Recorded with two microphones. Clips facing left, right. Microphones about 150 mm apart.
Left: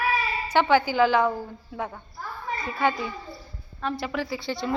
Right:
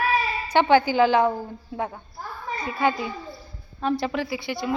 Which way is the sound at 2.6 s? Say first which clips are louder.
Right 2 dB; 15° right (ahead or behind).